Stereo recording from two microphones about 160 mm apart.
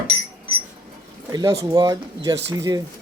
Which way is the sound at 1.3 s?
25° right (ahead or behind).